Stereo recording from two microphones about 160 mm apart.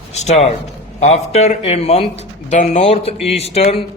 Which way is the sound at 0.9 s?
40° left (ahead or behind).